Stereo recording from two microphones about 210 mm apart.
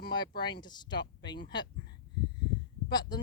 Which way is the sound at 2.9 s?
20° left (ahead or behind).